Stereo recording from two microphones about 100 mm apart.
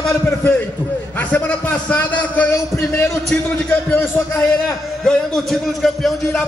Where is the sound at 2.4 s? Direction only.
25° left (ahead or behind).